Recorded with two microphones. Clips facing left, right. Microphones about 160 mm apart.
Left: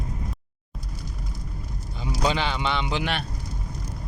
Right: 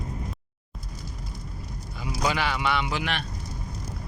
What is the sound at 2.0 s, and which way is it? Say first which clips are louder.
Speech: left 2 dB; 25° left (ahead or behind).